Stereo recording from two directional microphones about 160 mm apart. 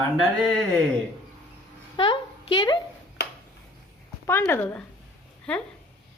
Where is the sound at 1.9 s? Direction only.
35° left (ahead or behind).